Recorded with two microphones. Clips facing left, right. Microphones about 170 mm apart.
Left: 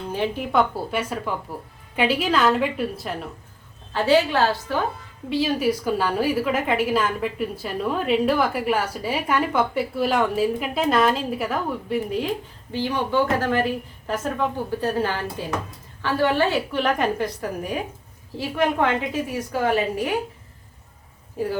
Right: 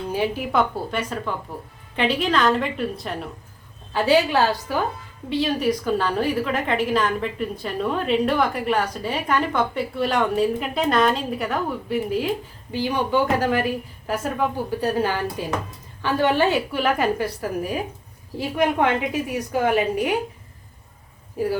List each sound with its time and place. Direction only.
0.1 s a woman's voice: 5° right (ahead or behind)
0.9 s a woman's voice: 10° left (ahead or behind)
3.9 s a woman's voice: 10° right (ahead or behind)
5.3 s a woman's voice: 5° left (ahead or behind); by 16.8 s 15° right (ahead or behind)
16.8 s a woman's voice: 5° right (ahead or behind)
18.5 s a woman's voice: 15° right (ahead or behind)
21.4 s a woman's voice: 10° right (ahead or behind)